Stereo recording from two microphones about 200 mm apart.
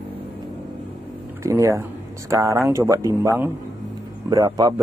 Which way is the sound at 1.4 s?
15° right (ahead or behind).